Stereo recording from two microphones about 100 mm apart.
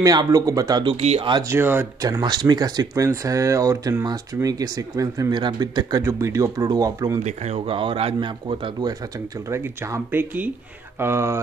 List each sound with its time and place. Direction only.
0.0 s speech: 40° right (ahead or behind)
0.8 s speech: 90° right
1.5 s speech: 20° right (ahead or behind)
2.0 s speech: 35° right (ahead or behind)
5.3 s speech: 45° right (ahead or behind)
7.4 s speech: 80° right; by 8.7 s 60° right (ahead or behind)
9.5 s speech: 30° right (ahead or behind)